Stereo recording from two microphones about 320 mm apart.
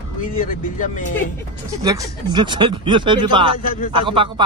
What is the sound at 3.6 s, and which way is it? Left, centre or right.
Speech, left.